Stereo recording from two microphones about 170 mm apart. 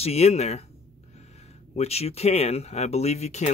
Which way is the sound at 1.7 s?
40° left (ahead or behind).